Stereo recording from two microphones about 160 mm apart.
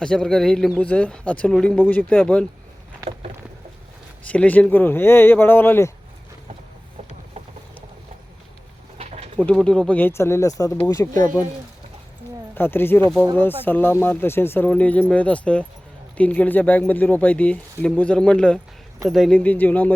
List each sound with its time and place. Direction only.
0.0 s a man's voice: 5° left (ahead or behind)
4.3 s speech: 10° left (ahead or behind)
9.0 s pigeon: 45° right (ahead or behind)
9.4 s speech: 5° left (ahead or behind)
12.5 s speech: 15° left (ahead or behind)